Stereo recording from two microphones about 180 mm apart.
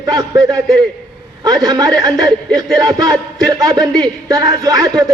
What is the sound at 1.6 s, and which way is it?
A man's voice, 20° right (ahead or behind).